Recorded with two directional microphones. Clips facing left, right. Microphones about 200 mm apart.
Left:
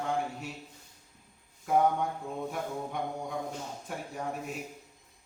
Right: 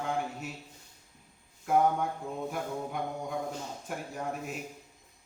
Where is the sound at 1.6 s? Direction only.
Centre (ahead or behind).